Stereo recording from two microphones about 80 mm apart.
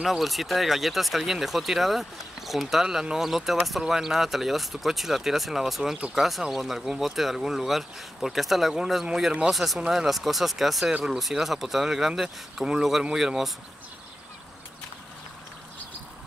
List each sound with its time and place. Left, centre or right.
0.0 s speech: centre